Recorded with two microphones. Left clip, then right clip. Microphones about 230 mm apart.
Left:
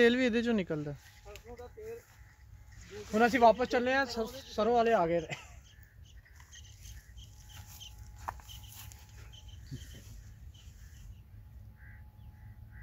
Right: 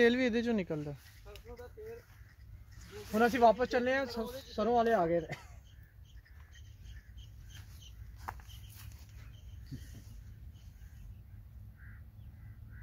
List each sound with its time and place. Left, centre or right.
0.0 s speech: centre
3.2 s speech: left
7.8 s chicken: left